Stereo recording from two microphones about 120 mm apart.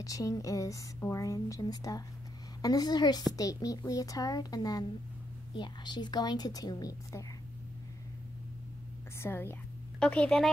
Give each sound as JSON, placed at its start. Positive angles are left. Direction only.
{"t": 0.0, "sound": "a woman's voice", "side_deg": 30}
{"t": 9.2, "sound": "speech", "side_deg": 20}
{"t": 9.9, "sound": "a woman's voice", "side_deg": 10}